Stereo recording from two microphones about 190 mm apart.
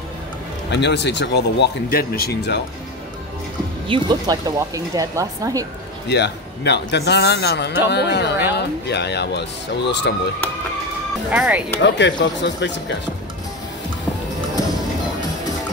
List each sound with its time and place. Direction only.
0.7 s speech: 65° left (ahead or behind)
3.8 s speech: 25° right (ahead or behind)
6.0 s speech: 65° left (ahead or behind)
11.3 s speech: 5° right (ahead or behind)
11.8 s speech: 65° left (ahead or behind)